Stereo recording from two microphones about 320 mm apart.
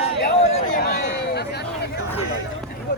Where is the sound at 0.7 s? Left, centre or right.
Left.